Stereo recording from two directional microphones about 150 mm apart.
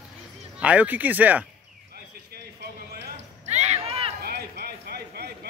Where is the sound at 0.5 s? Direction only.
10° right (ahead or behind).